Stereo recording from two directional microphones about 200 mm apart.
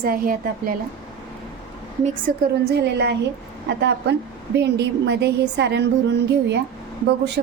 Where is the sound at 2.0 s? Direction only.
40° right (ahead or behind).